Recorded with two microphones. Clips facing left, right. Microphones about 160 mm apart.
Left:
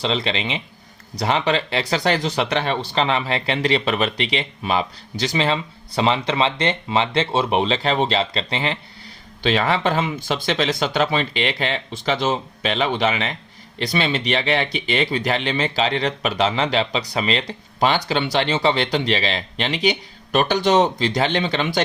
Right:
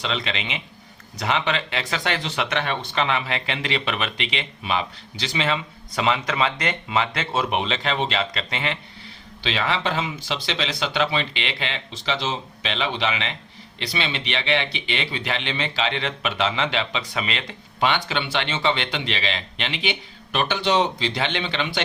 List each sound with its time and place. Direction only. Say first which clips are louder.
0.0 s speech: left 5 dB; 30° left (ahead or behind)
9.4 s speech: left 5 dB; 45° left (ahead or behind)